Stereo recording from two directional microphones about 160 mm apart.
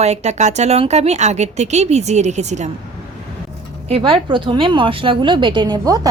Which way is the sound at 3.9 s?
35° right (ahead or behind).